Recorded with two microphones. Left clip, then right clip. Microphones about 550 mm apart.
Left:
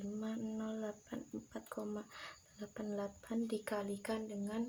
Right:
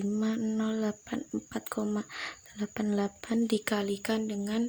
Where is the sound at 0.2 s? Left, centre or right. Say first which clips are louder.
Right 10 dB; centre.